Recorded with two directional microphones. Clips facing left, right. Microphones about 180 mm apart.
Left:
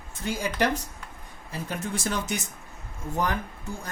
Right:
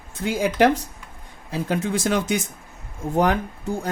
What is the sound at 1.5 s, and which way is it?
Speech, 90° right.